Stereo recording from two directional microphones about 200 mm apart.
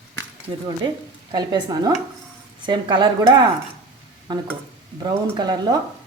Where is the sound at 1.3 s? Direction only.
20° right (ahead or behind).